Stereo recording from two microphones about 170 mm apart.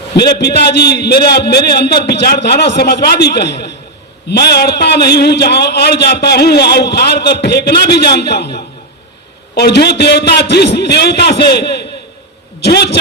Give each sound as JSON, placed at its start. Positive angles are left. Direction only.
{"t": 0.2, "sound": "a man's voice", "side_deg": 70}